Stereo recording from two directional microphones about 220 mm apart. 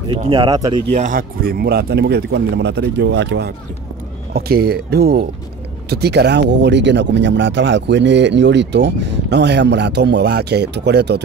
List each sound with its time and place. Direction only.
0.1 s speech: 20° right (ahead or behind)
0.9 s speech: 40° right (ahead or behind)